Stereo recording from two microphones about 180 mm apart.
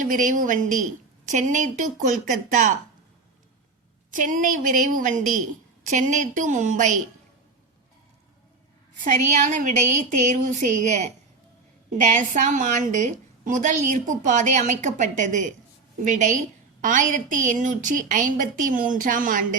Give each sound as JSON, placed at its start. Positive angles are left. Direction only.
{"t": 0.0, "sound": "a woman's voice", "side_deg": -45}
{"t": 4.1, "sound": "a woman's voice", "side_deg": -45}
{"t": 9.0, "sound": "a woman's voice", "side_deg": -45}